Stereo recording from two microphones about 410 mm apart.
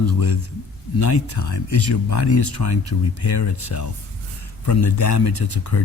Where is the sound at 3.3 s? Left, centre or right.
Left.